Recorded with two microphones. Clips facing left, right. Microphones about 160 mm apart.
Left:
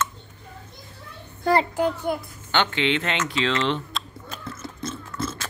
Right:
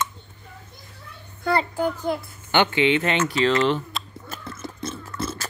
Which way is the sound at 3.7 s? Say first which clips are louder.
Right 2 dB; 5° right (ahead or behind).